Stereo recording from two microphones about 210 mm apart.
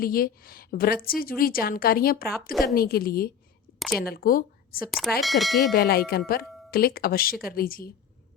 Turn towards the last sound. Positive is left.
turn(degrees=45)  # may be behind; listen again after turning